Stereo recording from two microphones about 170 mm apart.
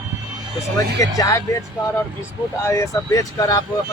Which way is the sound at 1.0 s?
20° left (ahead or behind).